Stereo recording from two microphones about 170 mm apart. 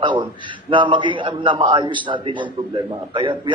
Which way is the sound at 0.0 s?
30° right (ahead or behind).